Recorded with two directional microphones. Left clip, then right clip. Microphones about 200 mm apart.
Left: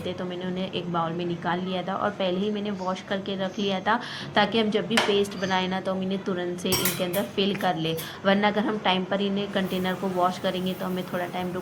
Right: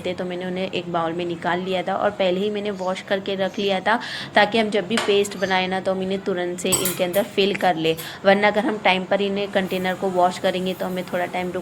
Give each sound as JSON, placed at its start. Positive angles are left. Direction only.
{"t": 0.6, "sound": "a woman's voice", "side_deg": -40}